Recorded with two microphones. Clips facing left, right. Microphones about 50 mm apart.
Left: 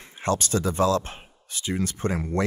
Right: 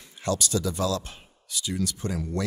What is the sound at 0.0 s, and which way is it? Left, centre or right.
Speech, left.